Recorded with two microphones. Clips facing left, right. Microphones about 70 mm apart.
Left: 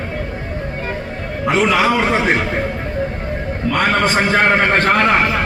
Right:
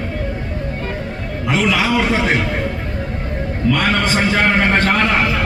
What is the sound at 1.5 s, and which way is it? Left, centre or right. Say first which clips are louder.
Speech: left 2 dB; left.